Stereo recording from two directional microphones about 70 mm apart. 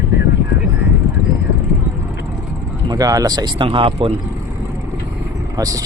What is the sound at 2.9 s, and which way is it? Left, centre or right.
Speech, right.